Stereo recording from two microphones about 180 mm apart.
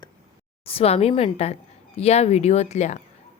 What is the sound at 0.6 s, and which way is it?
A woman's voice, 35° left (ahead or behind).